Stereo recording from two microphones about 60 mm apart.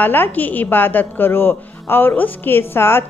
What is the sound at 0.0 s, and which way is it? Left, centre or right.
A man's voice, left.